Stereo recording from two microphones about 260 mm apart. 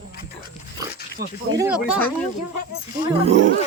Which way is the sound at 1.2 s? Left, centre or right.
Right.